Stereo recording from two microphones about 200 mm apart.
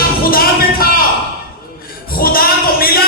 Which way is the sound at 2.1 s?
45° left (ahead or behind).